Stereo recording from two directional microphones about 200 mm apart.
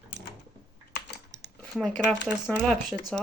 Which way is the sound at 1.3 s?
60° right (ahead or behind).